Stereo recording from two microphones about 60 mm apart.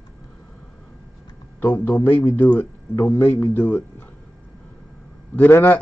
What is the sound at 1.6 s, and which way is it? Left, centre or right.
Speech, left.